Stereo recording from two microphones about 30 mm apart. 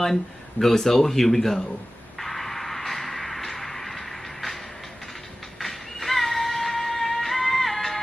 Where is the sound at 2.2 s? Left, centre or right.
Centre.